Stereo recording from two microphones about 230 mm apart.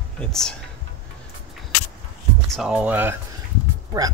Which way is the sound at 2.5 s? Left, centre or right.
Centre.